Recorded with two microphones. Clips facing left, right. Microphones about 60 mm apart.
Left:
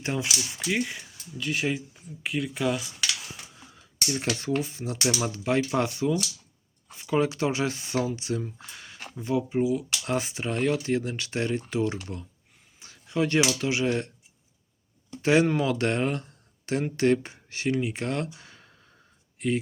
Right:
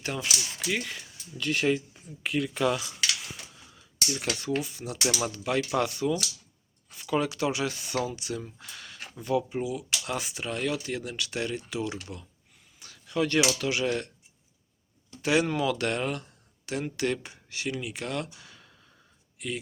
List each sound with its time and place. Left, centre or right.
0.0 s speech: left
1.4 s speech: centre
3.8 s a sound: left
4.4 s speech: left
12.8 s a sound: left
13.5 s speech: left
15.2 s speech: left